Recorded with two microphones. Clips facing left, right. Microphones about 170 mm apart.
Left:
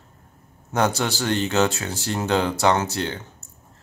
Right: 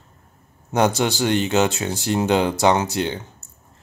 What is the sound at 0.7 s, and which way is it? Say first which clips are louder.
Speech: right 3 dB; 15° right (ahead or behind).